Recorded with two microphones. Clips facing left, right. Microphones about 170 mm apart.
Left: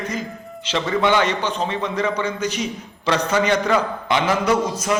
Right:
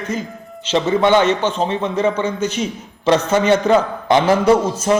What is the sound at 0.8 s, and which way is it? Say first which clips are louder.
A man's voice: right 5 dB; 25° right (ahead or behind).